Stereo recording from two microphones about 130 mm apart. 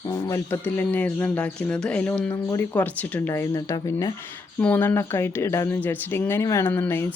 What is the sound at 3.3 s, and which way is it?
Speech, 20° left (ahead or behind).